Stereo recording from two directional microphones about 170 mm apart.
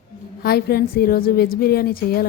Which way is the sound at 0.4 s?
65° left (ahead or behind).